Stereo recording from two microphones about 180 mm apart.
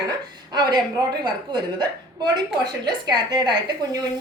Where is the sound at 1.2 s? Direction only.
25° right (ahead or behind).